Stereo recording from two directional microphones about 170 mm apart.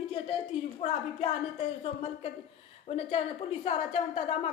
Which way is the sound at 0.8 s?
40° left (ahead or behind).